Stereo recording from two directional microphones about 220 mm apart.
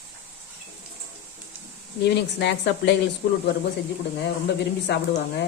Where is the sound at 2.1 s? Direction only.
50° left (ahead or behind).